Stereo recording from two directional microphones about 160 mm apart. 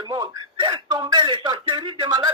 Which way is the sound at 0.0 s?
25° right (ahead or behind).